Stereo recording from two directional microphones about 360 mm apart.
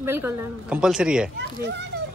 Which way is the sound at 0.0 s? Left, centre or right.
Centre.